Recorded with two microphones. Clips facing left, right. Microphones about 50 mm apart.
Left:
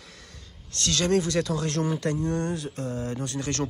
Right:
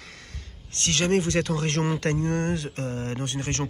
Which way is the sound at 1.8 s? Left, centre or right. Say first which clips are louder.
Right 1 dB; right.